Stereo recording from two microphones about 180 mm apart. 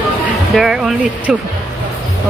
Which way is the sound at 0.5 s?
5° right (ahead or behind).